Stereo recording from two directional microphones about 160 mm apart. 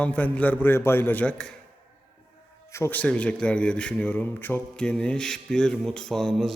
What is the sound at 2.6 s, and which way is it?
A man's voice, 15° left (ahead or behind).